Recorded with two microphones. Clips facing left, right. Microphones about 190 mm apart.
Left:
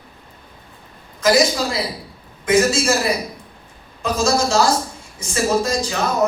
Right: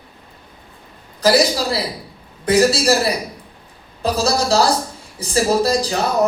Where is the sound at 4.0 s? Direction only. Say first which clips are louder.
Even; 35° right (ahead or behind).